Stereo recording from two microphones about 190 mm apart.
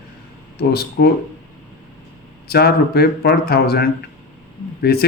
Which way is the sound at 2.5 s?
55° left (ahead or behind).